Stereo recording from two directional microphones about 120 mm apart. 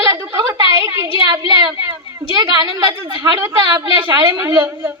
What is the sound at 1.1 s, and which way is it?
A woman's voice, 40° right (ahead or behind).